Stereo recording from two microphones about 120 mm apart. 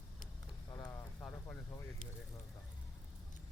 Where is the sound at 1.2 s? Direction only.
15° left (ahead or behind).